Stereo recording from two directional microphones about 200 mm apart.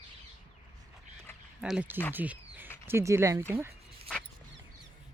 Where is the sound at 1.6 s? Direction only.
5° right (ahead or behind).